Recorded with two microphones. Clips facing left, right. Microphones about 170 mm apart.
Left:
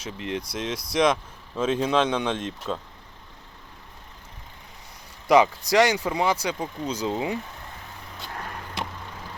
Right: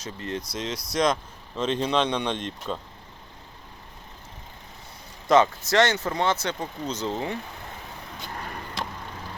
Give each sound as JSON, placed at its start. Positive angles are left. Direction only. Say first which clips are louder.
{"t": 0.0, "sound": "speech", "louder": "left 2 dB", "side_deg": 10}
{"t": 5.3, "sound": "speech", "louder": "left 1 dB", "side_deg": 15}